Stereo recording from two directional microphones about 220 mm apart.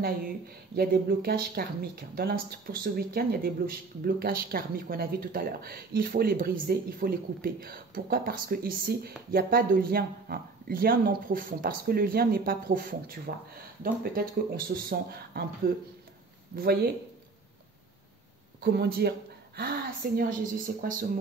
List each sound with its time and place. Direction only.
0.7 s speech: 45° right (ahead or behind)
18.6 s speech: 45° right (ahead or behind)